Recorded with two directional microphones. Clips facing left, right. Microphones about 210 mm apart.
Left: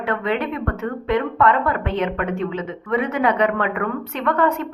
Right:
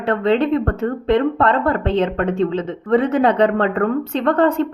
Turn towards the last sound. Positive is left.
turn(degrees=-30)  # may be behind; listen again after turning